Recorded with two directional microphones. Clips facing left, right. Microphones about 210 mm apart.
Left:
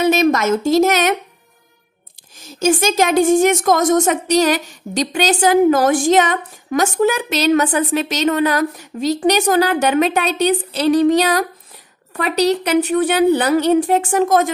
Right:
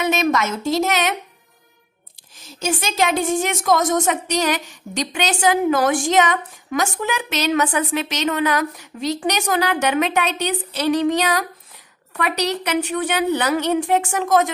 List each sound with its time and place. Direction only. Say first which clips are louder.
0.0 s a woman's voice: left 5 dB; 35° left (ahead or behind)
2.6 s a woman's voice: left 6 dB; 45° left (ahead or behind)